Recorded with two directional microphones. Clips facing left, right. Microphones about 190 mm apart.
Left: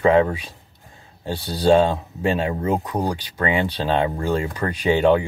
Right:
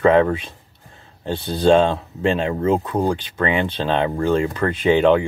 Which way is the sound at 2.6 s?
15° left (ahead or behind).